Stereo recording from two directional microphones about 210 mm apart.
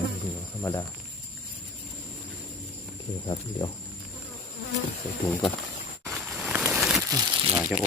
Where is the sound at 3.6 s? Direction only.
20° left (ahead or behind).